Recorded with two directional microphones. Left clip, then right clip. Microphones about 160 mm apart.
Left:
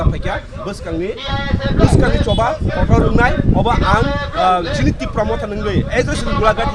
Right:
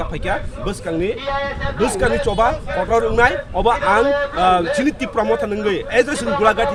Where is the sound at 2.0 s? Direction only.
25° right (ahead or behind).